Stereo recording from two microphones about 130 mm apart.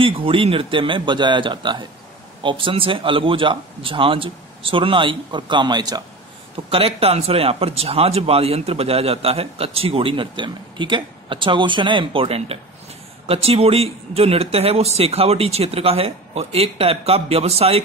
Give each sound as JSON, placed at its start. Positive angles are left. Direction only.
{"t": 0.0, "sound": "speech", "side_deg": -45}
{"t": 6.7, "sound": "speech", "side_deg": -50}